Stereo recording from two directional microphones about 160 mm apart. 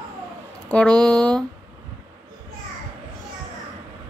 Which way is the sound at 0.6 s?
5° left (ahead or behind).